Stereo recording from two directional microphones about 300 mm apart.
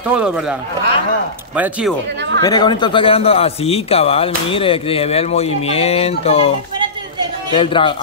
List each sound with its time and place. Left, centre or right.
0.1 s speech: centre
2.4 s a man's voice: centre
7.5 s a man's voice: centre